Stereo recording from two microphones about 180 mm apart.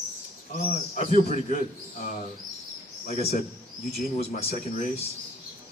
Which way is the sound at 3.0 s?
40° left (ahead or behind).